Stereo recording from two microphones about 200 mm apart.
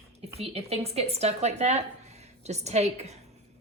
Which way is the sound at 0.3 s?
30° right (ahead or behind).